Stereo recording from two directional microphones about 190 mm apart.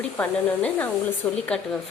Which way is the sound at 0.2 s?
10° left (ahead or behind).